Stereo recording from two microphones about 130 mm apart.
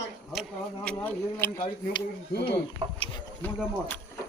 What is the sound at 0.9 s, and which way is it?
Speech, 10° left (ahead or behind).